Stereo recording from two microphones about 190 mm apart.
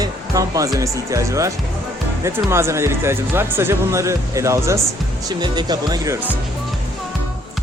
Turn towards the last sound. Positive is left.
turn(degrees=-15)  # may be behind; listen again after turning